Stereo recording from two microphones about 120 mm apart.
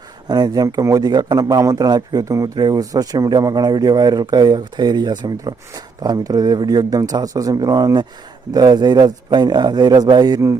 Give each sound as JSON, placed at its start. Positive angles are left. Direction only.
{"t": 0.3, "sound": "a man's voice", "side_deg": -35}